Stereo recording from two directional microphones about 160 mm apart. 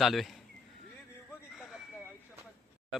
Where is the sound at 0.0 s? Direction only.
Centre (ahead or behind).